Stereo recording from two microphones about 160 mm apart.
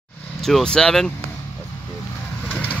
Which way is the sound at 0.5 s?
5° left (ahead or behind).